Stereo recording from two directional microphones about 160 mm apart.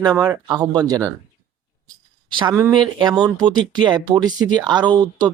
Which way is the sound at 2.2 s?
30° right (ahead or behind).